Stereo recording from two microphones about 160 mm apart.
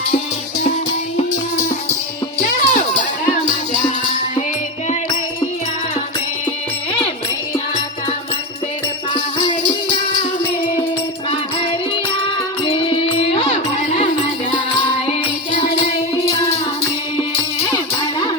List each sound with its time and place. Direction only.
2.6 s music: 55° left (ahead or behind)
13.3 s music: 40° left (ahead or behind)